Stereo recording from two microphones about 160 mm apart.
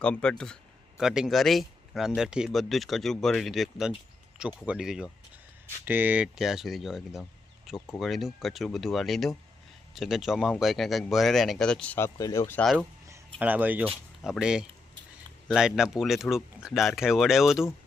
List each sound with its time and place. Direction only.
0.0 s speech: 5° left (ahead or behind)
13.1 s speech: 10° right (ahead or behind)